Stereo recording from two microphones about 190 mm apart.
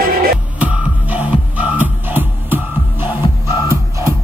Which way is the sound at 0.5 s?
5° right (ahead or behind).